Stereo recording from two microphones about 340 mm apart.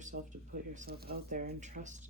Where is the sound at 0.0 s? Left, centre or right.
Right.